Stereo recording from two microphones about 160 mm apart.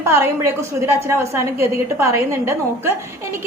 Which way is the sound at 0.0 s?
15° right (ahead or behind).